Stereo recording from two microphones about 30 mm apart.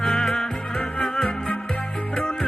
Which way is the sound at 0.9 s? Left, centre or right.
Left.